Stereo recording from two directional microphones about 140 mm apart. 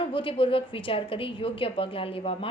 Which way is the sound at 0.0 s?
40° left (ahead or behind).